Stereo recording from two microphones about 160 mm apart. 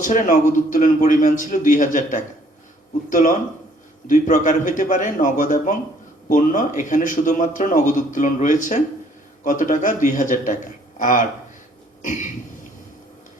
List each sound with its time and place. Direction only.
0.0 s a man's voice: 50° left (ahead or behind)